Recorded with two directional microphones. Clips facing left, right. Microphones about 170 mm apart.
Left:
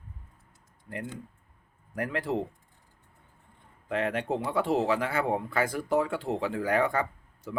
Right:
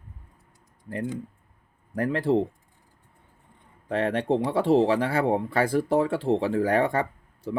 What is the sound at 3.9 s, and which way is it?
Speech, 35° right (ahead or behind).